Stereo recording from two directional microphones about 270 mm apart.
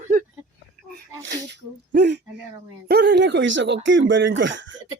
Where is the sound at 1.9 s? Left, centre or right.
Right.